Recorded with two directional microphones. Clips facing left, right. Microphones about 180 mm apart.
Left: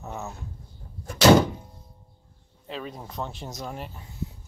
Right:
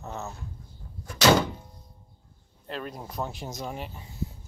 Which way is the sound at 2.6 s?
Centre (ahead or behind).